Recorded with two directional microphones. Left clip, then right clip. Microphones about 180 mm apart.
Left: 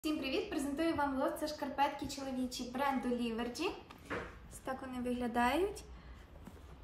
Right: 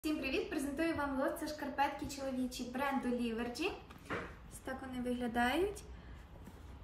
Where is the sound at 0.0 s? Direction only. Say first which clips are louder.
Even; centre (ahead or behind).